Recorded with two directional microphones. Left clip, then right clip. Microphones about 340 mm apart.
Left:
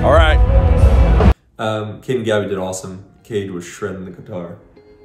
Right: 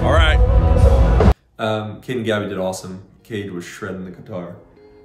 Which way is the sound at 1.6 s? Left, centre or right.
Centre.